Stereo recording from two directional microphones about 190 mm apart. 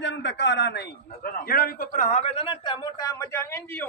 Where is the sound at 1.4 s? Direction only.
50° left (ahead or behind).